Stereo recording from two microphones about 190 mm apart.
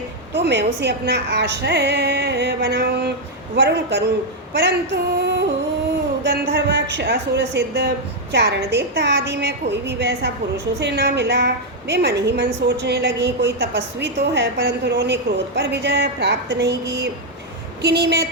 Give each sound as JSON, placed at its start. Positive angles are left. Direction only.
{"t": 0.3, "sound": "a woman's voice", "side_deg": -65}
{"t": 17.8, "sound": "a woman's voice", "side_deg": -65}